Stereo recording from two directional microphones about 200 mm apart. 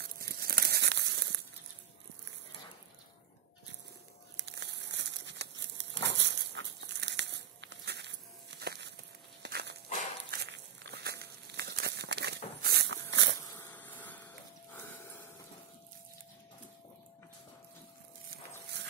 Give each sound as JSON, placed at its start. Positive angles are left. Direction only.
{"t": 0.0, "sound": "crumpling", "side_deg": -50}
{"t": 4.4, "sound": "crumpling", "side_deg": -60}
{"t": 9.4, "sound": "dog", "side_deg": -55}
{"t": 10.3, "sound": "a sound", "side_deg": -60}
{"t": 12.6, "sound": "dog", "side_deg": -60}
{"t": 13.4, "sound": "a sound", "side_deg": 15}